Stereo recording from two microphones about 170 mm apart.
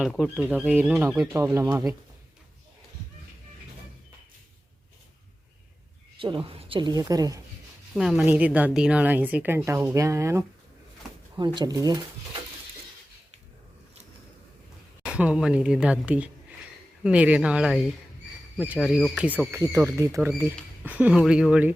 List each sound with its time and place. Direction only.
0.0 s speech: centre (ahead or behind)
1.3 s a woman's voice: 15° right (ahead or behind)
6.1 s a woman's voice: 30° right (ahead or behind)
7.9 s a woman's voice: centre (ahead or behind)
11.3 s a woman's voice: 25° right (ahead or behind)
15.0 s a woman's voice: 5° right (ahead or behind)
19.1 s a woman's voice: 5° right (ahead or behind)